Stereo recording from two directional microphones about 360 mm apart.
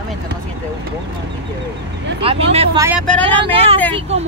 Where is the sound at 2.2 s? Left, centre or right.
Centre.